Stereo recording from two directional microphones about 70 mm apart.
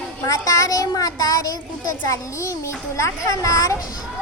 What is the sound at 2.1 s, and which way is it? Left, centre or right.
A child's voice, left.